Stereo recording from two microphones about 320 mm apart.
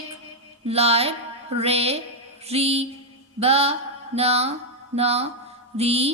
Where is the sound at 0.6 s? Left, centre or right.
Centre.